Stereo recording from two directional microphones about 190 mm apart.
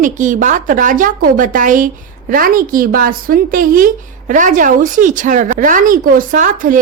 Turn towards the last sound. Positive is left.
turn(degrees=-45)  # may be behind; listen again after turning